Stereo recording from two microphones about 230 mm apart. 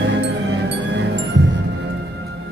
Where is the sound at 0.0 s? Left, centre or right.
Right.